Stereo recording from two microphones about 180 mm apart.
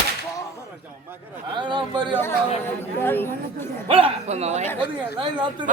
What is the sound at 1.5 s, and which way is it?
Speech, 25° right (ahead or behind).